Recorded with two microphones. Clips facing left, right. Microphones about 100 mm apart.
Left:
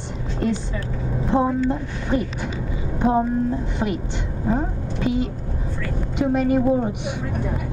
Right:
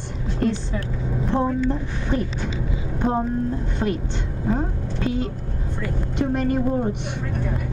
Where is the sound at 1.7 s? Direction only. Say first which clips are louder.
Left 2 dB; 5° left (ahead or behind).